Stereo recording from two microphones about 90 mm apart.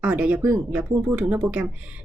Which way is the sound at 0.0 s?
15° right (ahead or behind).